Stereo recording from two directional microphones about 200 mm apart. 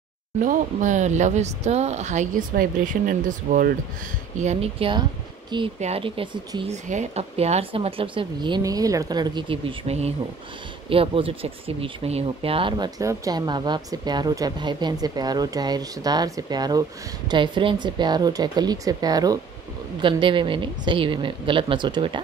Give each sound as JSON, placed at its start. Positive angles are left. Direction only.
{"t": 0.4, "sound": "speech", "side_deg": -40}
{"t": 4.4, "sound": "speech", "side_deg": -30}